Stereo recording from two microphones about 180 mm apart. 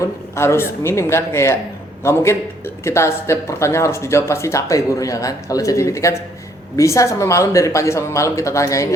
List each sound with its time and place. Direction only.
0.0 s speech: 15° left (ahead or behind)